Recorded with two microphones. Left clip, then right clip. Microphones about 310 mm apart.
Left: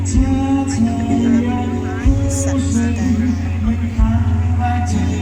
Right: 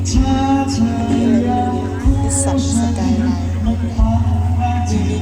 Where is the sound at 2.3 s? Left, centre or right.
Right.